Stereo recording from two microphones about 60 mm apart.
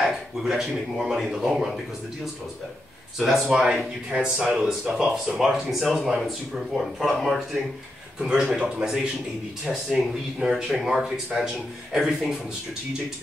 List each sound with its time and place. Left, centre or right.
0.4 s speech: centre
3.2 s speech: centre
8.5 s speech: centre